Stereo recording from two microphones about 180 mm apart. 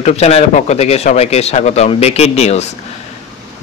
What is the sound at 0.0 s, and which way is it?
Speech, 35° left (ahead or behind).